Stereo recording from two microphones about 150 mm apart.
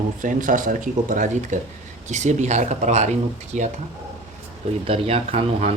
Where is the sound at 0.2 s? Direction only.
60° right (ahead or behind).